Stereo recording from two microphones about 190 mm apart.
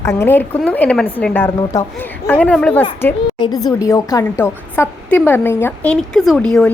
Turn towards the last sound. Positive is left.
turn(degrees=5)  # may be behind; listen again after turning